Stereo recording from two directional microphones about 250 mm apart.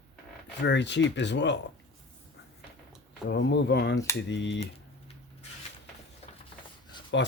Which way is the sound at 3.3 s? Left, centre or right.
Left.